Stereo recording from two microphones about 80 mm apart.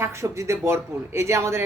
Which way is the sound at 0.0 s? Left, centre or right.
Right.